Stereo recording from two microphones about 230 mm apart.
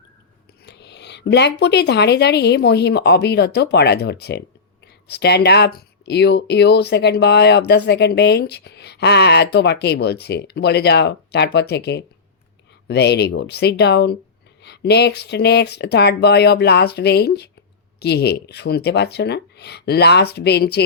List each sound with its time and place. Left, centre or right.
0.6 s a woman's voice: left